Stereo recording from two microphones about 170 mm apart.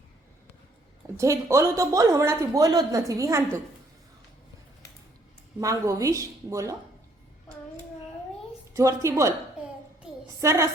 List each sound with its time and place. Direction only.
1.1 s speech: 15° right (ahead or behind)
5.5 s speech: 20° right (ahead or behind)
8.7 s a woman's voice: 20° right (ahead or behind)
10.4 s a woman's voice: 15° right (ahead or behind)